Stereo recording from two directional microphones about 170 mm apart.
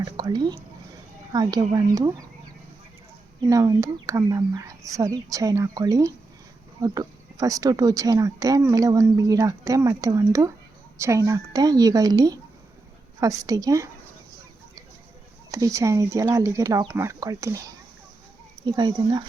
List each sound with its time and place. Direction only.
0.0 s speech: 25° right (ahead or behind)
3.4 s speech: 20° right (ahead or behind)
15.5 s speech: 20° right (ahead or behind)